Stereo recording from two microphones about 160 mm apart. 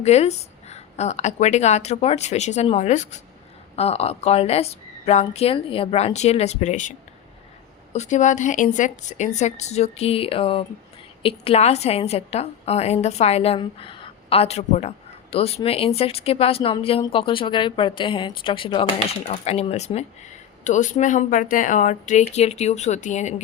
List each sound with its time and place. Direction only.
0.0 s a woman's voice: 45° left (ahead or behind)
7.9 s a woman's voice: 45° left (ahead or behind)